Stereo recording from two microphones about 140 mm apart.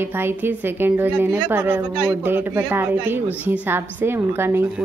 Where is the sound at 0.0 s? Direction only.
15° right (ahead or behind).